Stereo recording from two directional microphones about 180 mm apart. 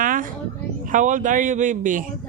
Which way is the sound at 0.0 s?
50° right (ahead or behind).